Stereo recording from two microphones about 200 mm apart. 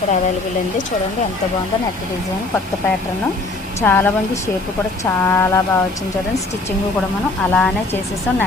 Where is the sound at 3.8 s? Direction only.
10° left (ahead or behind).